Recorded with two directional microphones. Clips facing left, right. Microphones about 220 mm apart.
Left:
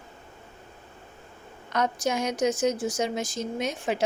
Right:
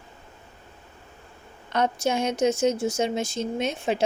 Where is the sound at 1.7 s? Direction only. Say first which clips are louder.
Right 2 dB; 30° right (ahead or behind).